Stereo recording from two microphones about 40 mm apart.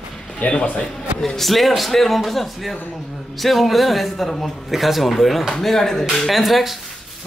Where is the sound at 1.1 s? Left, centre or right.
Centre.